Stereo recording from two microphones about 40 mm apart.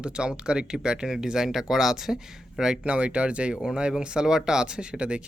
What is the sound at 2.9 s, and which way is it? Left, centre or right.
Speech, right.